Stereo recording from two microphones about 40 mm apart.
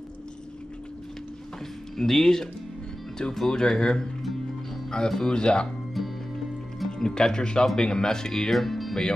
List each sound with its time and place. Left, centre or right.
2.0 s speech: centre
5.3 s speech: left
5.9 s music: centre
6.9 s speech: centre